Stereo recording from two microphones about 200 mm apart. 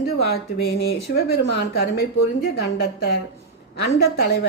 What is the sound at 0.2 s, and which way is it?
A woman's voice, 50° left (ahead or behind).